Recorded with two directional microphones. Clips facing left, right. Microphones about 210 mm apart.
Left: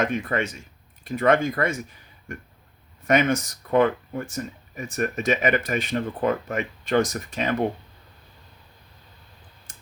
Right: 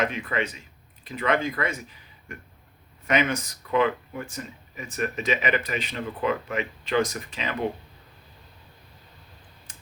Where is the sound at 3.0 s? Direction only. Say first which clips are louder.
Left 4 dB; 45° left (ahead or behind).